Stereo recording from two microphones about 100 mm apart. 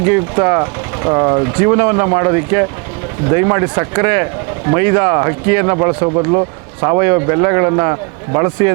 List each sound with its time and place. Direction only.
0.0 s speech: 30° right (ahead or behind)